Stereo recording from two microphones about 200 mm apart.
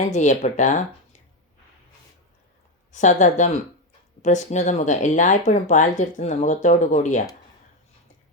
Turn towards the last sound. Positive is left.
turn(degrees=35)  # may be behind; listen again after turning